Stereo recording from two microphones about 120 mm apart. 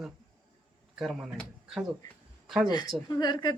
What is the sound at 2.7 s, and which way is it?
Speech, 35° left (ahead or behind).